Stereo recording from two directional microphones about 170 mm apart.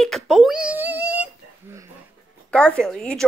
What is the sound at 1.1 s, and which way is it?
Whimper, 15° right (ahead or behind).